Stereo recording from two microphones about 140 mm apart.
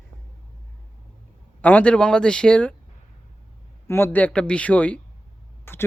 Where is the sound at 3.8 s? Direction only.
15° left (ahead or behind).